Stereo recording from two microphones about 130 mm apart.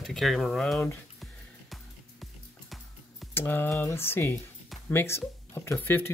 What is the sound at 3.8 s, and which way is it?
Speech, 20° left (ahead or behind).